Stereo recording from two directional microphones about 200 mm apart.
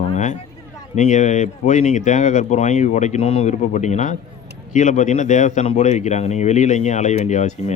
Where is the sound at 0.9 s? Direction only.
35° left (ahead or behind).